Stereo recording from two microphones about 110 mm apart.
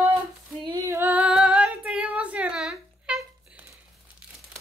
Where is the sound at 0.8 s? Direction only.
25° right (ahead or behind).